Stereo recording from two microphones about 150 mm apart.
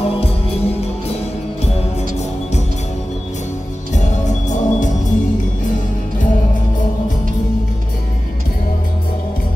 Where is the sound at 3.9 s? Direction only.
50° left (ahead or behind).